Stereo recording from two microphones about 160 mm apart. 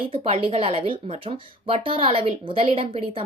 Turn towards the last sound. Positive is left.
turn(degrees=-35)  # may be behind; listen again after turning